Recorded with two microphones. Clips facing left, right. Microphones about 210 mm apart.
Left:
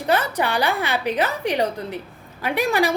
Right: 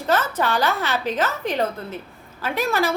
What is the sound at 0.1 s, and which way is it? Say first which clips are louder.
A woman's voice: even; 15° left (ahead or behind).